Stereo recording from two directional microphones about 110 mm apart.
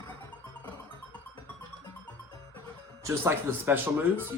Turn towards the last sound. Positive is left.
turn(degrees=-20)  # may be behind; listen again after turning